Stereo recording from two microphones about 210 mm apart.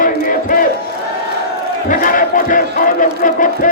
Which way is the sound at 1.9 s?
40° left (ahead or behind).